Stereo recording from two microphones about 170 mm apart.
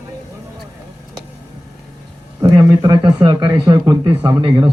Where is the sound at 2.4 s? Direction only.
20° right (ahead or behind).